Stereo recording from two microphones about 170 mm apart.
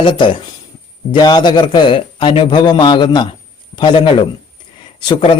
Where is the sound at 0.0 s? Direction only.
30° left (ahead or behind).